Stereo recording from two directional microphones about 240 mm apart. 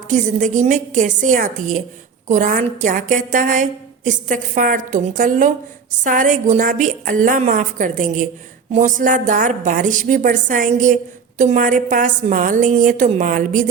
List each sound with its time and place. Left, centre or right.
0.1 s a woman's voice: right